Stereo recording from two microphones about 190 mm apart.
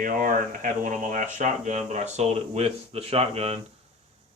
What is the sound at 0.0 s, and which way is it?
Speech, 45° right (ahead or behind).